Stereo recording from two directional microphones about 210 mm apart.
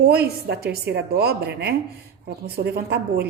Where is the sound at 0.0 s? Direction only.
50° right (ahead or behind).